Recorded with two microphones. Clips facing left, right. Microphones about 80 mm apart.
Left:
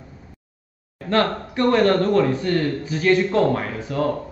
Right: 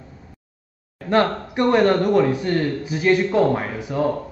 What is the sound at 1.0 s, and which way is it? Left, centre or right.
Speech, right.